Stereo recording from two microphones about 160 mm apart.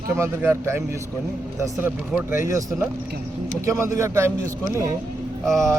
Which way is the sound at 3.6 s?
20° right (ahead or behind).